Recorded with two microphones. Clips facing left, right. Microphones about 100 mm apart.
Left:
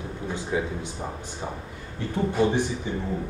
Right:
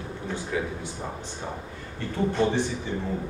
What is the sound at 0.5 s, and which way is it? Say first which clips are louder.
Speech: left 2 dB; 20° left (ahead or behind).